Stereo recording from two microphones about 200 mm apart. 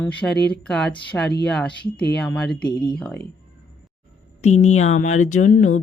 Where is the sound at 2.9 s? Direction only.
5° left (ahead or behind).